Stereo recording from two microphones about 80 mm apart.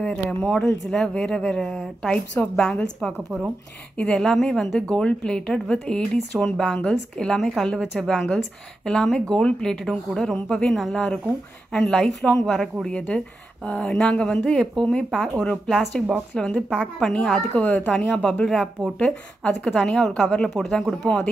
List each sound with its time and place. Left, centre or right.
0.0 s a woman's voice: centre
16.6 s a woman's voice: centre
17.0 s a woman's voice: centre
17.6 s speech: left
18.1 s a woman's voice: centre